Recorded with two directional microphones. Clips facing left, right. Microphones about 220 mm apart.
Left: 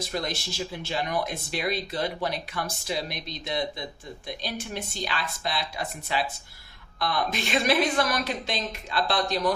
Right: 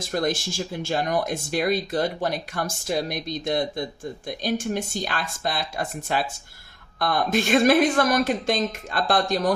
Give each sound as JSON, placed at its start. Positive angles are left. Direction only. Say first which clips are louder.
{"t": 0.0, "sound": "speech", "louder": "right 6 dB", "side_deg": -45}